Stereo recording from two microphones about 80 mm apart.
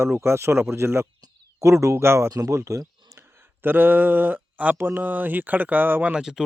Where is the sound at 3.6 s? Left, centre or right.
Right.